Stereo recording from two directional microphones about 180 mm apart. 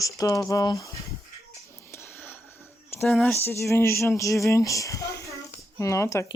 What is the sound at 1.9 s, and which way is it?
Whispering, 10° left (ahead or behind).